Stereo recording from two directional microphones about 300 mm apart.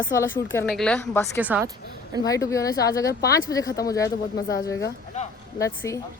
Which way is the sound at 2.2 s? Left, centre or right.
Centre.